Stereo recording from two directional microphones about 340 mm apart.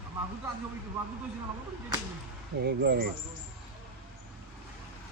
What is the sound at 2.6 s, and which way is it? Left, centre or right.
Speech, right.